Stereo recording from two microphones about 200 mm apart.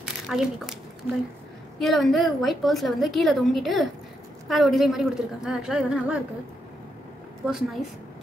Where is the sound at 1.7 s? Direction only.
Centre (ahead or behind).